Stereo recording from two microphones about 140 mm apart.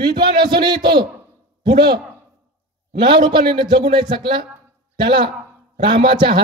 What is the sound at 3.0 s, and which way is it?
A man's voice, 35° right (ahead or behind).